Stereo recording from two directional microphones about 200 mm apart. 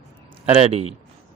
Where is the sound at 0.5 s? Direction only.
30° right (ahead or behind).